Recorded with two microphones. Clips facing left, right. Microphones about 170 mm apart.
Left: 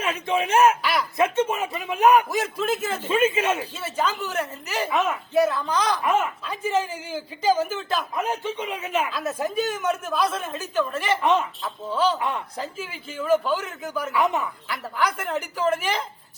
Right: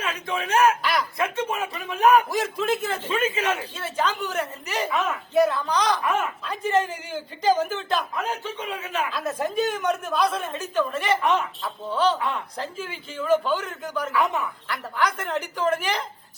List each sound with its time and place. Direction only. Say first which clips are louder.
0.0 s speech: left 4 dB; 25° left (ahead or behind)
0.8 s a sound: even; 5° left (ahead or behind)
1.2 s speech: left 4 dB; 25° left (ahead or behind)
2.3 s speech: even; centre (ahead or behind)
3.1 s speech: left 4 dB; 20° left (ahead or behind)
3.6 s speech: even; 5° left (ahead or behind)
8.1 s speech: left 3 dB; 20° left (ahead or behind)
9.1 s speech: even; centre (ahead or behind)
14.1 s speech: left 2 dB; 20° left (ahead or behind)
14.7 s speech: even; 5° left (ahead or behind)